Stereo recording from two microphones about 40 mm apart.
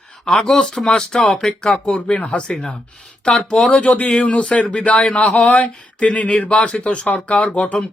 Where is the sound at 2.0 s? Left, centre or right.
Left.